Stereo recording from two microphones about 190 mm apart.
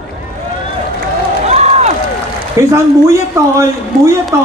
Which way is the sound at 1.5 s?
35° right (ahead or behind).